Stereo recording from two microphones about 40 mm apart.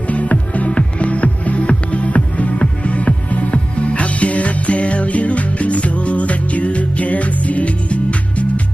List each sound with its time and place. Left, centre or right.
0.1 s music: left